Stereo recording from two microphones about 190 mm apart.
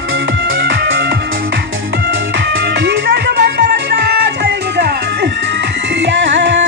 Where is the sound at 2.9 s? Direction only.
60° right (ahead or behind).